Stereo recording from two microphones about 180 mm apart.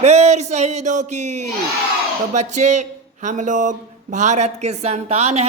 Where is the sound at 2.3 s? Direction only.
40° right (ahead or behind).